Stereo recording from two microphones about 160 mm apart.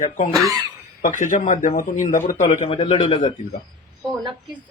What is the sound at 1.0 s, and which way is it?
Speech, 55° left (ahead or behind).